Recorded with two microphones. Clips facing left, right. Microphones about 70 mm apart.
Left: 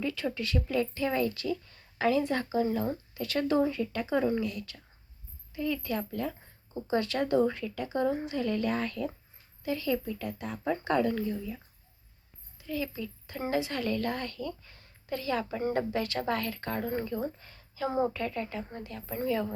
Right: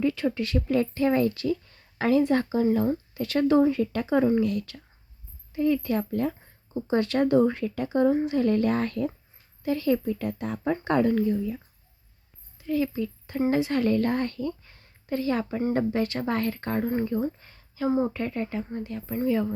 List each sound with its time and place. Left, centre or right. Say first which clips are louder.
0.0 s a sound: right 8 dB; right
0.3 s a woman's voice: right 5 dB; right
5.5 s a woman's voice: right 8 dB; right
12.6 s a child's voice: right 8 dB; right
17.8 s a woman's voice: right 4 dB; centre
18.1 s a woman's voice: right 4 dB; right